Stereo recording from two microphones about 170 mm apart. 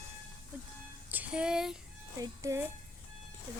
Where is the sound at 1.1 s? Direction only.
10° right (ahead or behind).